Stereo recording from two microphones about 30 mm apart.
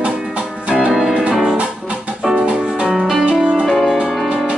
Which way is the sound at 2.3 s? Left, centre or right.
Right.